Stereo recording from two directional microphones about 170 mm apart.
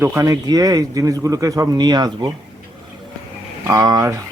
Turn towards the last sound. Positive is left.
turn(degrees=-20)  # may be behind; listen again after turning